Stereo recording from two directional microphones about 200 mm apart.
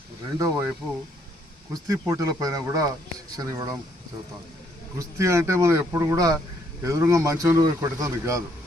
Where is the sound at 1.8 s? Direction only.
15° right (ahead or behind).